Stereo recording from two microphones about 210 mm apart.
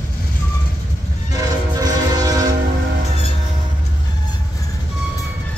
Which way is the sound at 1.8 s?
15° right (ahead or behind).